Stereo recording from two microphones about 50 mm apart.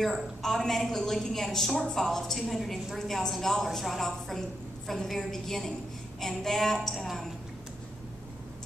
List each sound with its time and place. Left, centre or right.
0.0 s a woman's voice: centre